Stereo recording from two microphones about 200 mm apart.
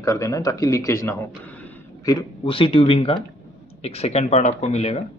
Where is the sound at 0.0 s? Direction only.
15° left (ahead or behind).